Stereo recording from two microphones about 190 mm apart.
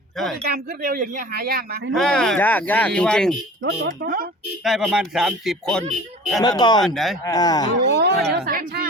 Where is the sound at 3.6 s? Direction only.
55° right (ahead or behind).